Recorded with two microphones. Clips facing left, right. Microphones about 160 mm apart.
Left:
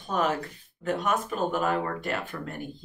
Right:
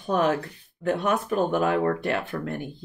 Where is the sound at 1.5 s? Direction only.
60° right (ahead or behind).